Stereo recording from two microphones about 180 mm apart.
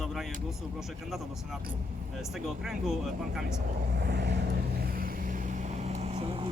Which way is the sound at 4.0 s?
65° right (ahead or behind).